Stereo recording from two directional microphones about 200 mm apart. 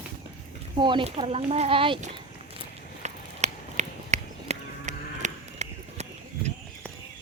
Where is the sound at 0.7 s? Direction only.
25° right (ahead or behind).